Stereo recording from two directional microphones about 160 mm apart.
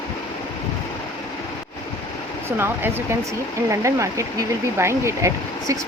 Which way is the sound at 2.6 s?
15° right (ahead or behind).